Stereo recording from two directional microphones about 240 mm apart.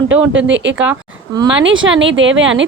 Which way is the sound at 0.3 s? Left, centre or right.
Right.